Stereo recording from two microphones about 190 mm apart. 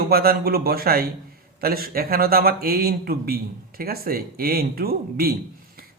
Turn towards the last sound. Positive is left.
turn(degrees=-55)  # may be behind; listen again after turning